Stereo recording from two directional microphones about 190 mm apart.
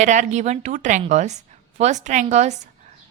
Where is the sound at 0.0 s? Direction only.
40° right (ahead or behind).